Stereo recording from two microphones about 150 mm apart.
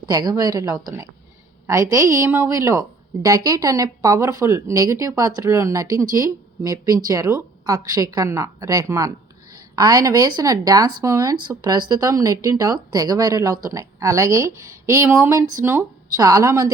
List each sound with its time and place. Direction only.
0.0 s speech: 25° right (ahead or behind)